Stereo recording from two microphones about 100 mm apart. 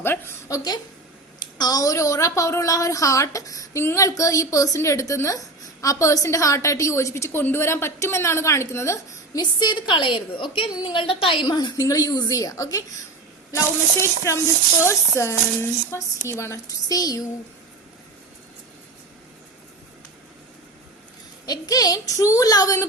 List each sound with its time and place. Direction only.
0.0 s a woman's voice: 25° left (ahead or behind)
9.4 s a woman's voice: 50° left (ahead or behind)
11.5 s a woman's voice: 40° left (ahead or behind)
13.5 s a woman's voice: 30° left (ahead or behind)
16.9 s a woman's voice: 40° left (ahead or behind)
21.4 s a woman's voice: 40° left (ahead or behind)